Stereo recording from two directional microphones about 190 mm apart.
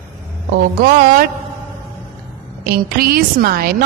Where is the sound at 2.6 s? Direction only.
50° right (ahead or behind).